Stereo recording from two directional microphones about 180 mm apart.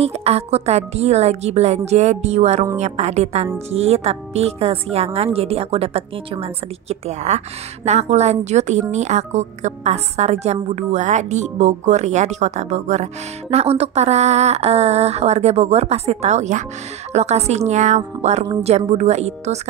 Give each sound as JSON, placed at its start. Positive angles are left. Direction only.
{"t": 0.0, "sound": "speech", "side_deg": -35}